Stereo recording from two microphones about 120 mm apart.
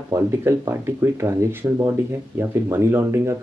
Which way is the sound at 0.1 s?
25° right (ahead or behind).